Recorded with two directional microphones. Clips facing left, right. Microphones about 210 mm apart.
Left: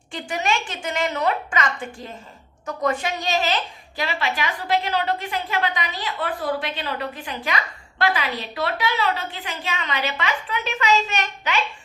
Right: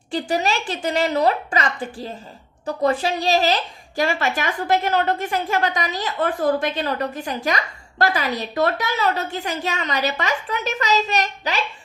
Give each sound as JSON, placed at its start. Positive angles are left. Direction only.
{"t": 0.1, "sound": "a woman's voice", "side_deg": -35}